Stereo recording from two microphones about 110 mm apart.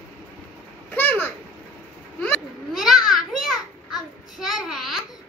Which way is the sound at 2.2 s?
Centre (ahead or behind).